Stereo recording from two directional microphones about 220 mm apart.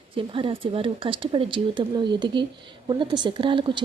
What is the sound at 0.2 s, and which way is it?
A woman's voice, 25° right (ahead or behind).